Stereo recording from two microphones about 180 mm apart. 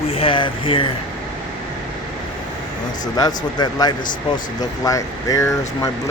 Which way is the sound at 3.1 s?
20° left (ahead or behind).